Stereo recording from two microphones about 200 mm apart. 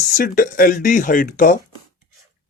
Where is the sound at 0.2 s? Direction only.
45° left (ahead or behind).